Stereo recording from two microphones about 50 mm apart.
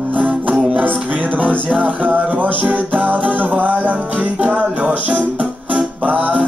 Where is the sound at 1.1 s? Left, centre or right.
Right.